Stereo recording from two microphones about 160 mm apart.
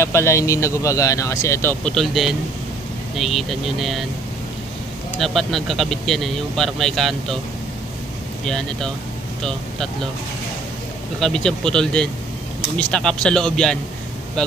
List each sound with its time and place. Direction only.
0.0 s speech: 15° left (ahead or behind)
2.0 s speech: centre (ahead or behind)
5.2 s speech: centre (ahead or behind)
8.5 s speech: 5° left (ahead or behind)
11.1 s speech: centre (ahead or behind)